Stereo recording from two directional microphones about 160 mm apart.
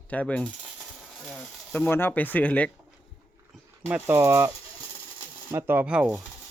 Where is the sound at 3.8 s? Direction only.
15° right (ahead or behind).